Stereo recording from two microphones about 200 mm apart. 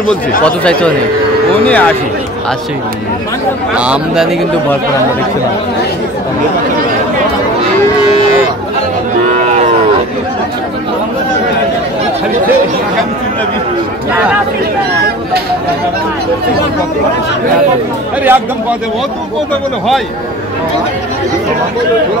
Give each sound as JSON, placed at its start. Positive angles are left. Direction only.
{"t": 0.5, "sound": "speech", "side_deg": 5}
{"t": 3.7, "sound": "speech", "side_deg": -5}
{"t": 9.4, "sound": "moo", "side_deg": -35}
{"t": 18.2, "sound": "speech", "side_deg": -10}